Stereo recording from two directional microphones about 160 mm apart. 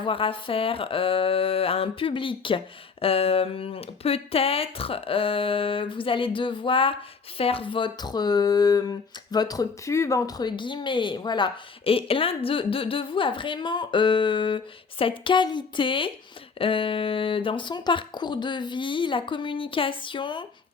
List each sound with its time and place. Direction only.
0.0 s speech: 35° left (ahead or behind)